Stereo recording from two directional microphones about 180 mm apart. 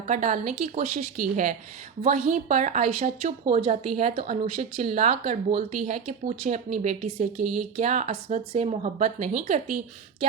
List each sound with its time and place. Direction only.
0.1 s a woman's voice: 40° right (ahead or behind)